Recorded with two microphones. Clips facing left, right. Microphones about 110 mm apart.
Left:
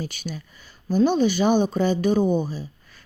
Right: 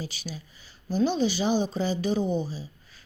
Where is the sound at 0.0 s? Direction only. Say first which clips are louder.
Left 5 dB; 55° left (ahead or behind).